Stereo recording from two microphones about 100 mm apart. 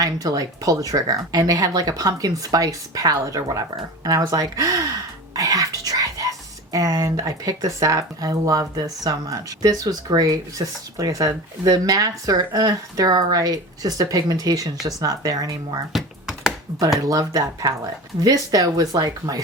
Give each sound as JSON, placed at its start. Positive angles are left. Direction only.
{"t": 0.0, "sound": "speech", "side_deg": -40}
{"t": 5.3, "sound": "throat clearing", "side_deg": -35}
{"t": 6.7, "sound": "speech", "side_deg": -35}
{"t": 15.9, "sound": "computer keyboard", "side_deg": -5}
{"t": 17.1, "sound": "speech", "side_deg": -35}